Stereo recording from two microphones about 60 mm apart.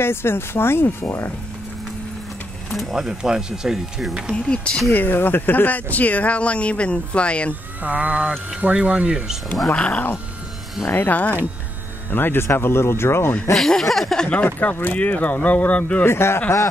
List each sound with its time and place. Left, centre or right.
0.0 s speech: left
2.7 s speech: centre
3.0 s speech: centre
4.9 s speech: left; by 7.5 s centre
7.8 s speech: right
9.7 s speech: centre
10.9 s speech: left
13.5 s speech: centre
14.4 s speech: left
16.1 s speech: left